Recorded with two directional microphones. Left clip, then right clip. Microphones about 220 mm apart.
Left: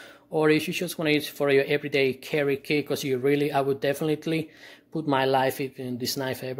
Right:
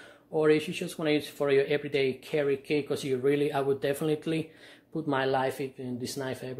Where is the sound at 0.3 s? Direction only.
35° left (ahead or behind).